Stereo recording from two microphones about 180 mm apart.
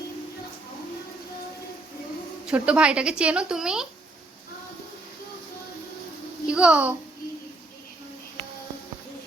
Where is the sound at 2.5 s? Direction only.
5° right (ahead or behind).